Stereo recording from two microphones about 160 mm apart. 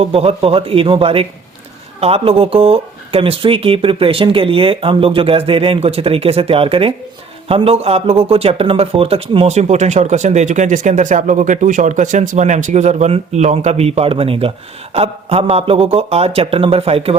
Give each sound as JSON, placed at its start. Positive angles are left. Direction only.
{"t": 0.0, "sound": "speech", "side_deg": -40}